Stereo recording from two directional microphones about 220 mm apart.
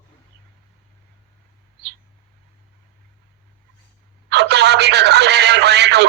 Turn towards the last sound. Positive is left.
turn(degrees=-50)  # may be behind; listen again after turning